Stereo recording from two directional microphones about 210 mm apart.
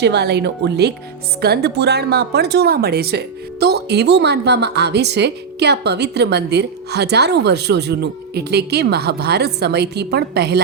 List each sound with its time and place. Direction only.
0.0 s speech: 50° right (ahead or behind)